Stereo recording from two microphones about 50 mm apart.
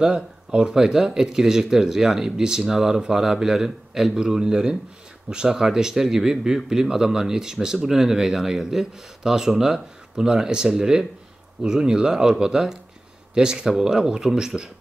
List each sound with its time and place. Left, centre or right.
0.0 s speech: centre